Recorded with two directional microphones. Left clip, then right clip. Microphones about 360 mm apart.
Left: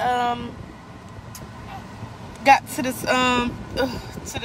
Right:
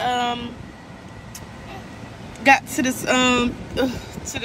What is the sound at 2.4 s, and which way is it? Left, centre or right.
A woman's voice, centre.